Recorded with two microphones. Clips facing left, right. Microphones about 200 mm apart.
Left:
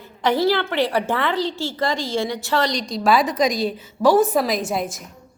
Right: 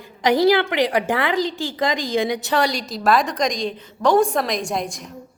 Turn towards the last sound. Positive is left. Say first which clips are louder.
# left 1 dB
turn(degrees=5)  # may be behind; listen again after turning